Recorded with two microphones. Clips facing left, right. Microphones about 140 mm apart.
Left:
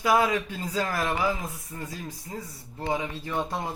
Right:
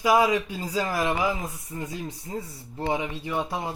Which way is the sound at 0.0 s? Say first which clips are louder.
Right 2 dB; 10° right (ahead or behind).